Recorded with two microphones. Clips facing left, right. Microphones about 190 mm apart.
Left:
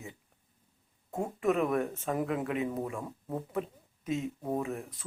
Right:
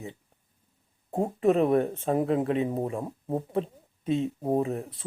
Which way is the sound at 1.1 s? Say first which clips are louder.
Right 6 dB; 30° right (ahead or behind).